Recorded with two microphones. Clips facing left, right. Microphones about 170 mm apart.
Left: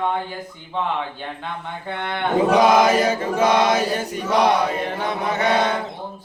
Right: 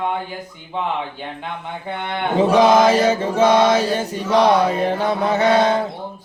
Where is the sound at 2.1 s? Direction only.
25° right (ahead or behind).